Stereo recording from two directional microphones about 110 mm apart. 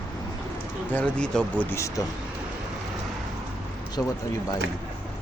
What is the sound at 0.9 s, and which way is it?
Speech, 10° left (ahead or behind).